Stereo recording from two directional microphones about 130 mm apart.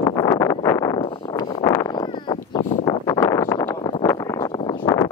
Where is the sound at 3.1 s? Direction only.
20° left (ahead or behind).